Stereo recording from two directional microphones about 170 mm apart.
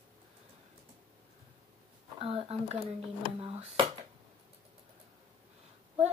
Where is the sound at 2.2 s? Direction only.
35° right (ahead or behind).